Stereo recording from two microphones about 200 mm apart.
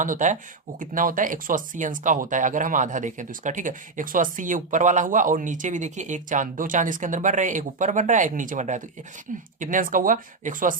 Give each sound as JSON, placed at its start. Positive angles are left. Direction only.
{"t": 0.0, "sound": "speech", "side_deg": -40}